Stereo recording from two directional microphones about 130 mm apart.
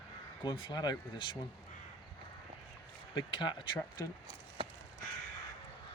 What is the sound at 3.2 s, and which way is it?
Speech, 40° left (ahead or behind).